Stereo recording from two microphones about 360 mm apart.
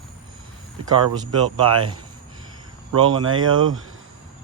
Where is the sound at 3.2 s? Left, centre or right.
Right.